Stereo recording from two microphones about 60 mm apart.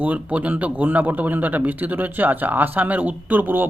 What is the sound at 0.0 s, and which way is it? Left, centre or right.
Speech, right.